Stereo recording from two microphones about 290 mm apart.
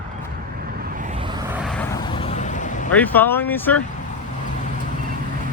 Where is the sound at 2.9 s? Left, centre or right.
Centre.